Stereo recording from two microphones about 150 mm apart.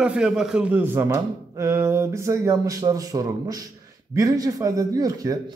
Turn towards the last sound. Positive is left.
turn(degrees=-25)  # may be behind; listen again after turning